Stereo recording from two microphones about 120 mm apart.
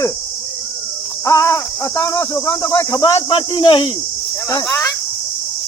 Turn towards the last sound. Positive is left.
turn(degrees=20)  # may be behind; listen again after turning